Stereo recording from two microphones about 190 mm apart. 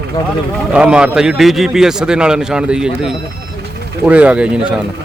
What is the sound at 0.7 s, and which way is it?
Speech, 5° right (ahead or behind).